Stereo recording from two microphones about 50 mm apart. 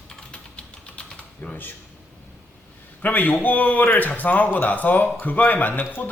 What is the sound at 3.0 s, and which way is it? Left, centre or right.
Speech, left.